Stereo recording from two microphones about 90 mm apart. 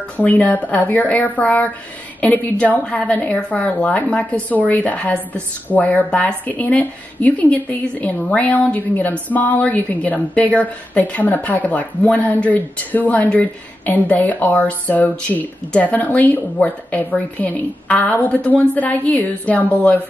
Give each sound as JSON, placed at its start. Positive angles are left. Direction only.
{"t": 0.2, "sound": "a woman's voice", "side_deg": 20}